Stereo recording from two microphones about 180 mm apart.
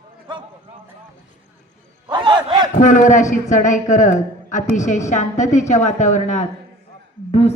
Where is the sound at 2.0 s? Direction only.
25° right (ahead or behind).